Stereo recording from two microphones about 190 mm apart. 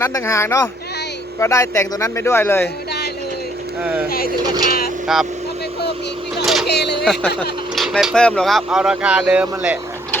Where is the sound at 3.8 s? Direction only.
10° right (ahead or behind).